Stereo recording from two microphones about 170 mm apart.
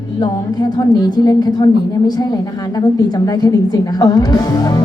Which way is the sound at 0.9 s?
25° left (ahead or behind).